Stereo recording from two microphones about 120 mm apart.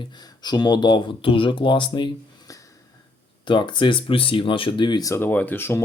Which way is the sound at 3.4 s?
40° left (ahead or behind).